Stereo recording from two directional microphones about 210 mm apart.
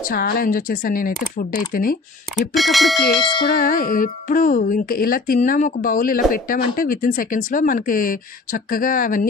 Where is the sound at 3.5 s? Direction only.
40° left (ahead or behind).